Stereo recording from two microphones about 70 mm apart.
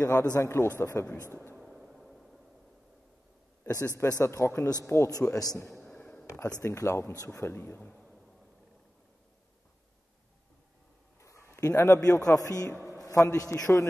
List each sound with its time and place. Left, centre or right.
0.0 s a man's voice: left
0.4 s speech: left
1.6 s music: centre
3.6 s a man's voice: left
5.1 s a man's voice: left
5.9 s a sound: centre
6.6 s a man's voice: left
7.9 s a sound: centre
11.1 s a man's voice: left